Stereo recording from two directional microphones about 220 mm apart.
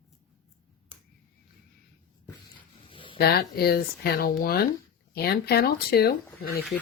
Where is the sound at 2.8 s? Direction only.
25° left (ahead or behind).